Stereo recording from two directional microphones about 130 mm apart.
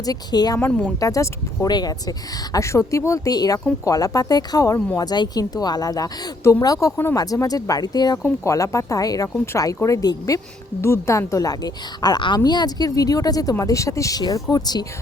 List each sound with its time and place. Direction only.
0.0 s speech: 30° left (ahead or behind)
0.6 s speech: 10° left (ahead or behind)
0.9 s speech: 25° left (ahead or behind)